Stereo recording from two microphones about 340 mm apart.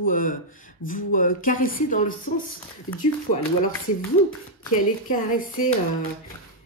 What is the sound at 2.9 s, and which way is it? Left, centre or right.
Speech, left.